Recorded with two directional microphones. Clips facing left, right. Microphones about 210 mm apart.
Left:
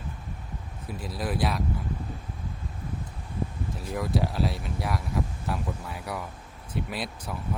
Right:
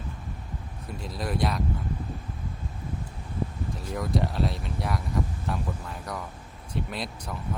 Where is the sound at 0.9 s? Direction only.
5° left (ahead or behind).